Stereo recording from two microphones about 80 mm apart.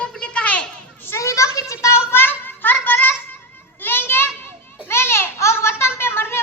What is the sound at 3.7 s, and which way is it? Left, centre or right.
Children playing, left.